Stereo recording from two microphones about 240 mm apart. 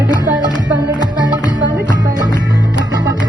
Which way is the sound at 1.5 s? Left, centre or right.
Centre.